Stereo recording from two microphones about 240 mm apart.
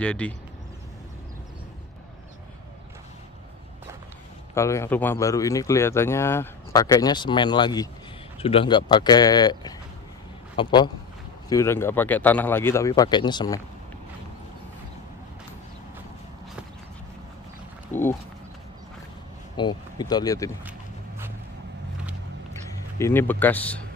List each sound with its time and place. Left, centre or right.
0.0 s speech: centre
4.6 s a man's voice: centre
19.5 s speech: centre
22.5 s a sound: centre